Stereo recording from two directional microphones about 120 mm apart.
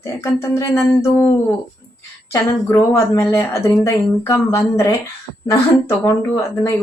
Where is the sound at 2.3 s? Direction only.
25° left (ahead or behind).